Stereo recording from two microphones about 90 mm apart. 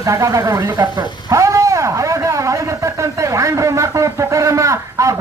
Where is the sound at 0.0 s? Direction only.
40° right (ahead or behind).